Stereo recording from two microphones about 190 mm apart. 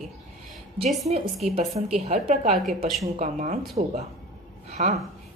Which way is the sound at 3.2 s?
40° right (ahead or behind).